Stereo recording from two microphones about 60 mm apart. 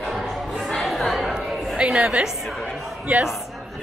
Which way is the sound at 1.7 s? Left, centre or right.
Centre.